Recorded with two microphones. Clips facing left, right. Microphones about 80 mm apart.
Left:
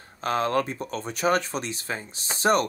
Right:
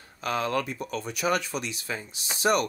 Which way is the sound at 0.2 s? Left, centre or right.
Left.